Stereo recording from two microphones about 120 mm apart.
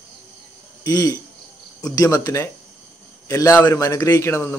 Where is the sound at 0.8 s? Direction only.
30° left (ahead or behind).